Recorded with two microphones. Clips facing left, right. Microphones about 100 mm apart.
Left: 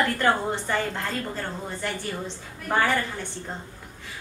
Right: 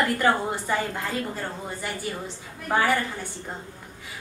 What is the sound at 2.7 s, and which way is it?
Speech, 10° right (ahead or behind).